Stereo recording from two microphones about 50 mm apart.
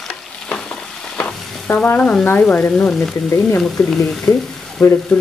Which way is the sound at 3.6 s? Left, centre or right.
Centre.